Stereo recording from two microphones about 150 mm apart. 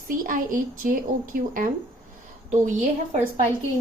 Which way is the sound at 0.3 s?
65° right (ahead or behind).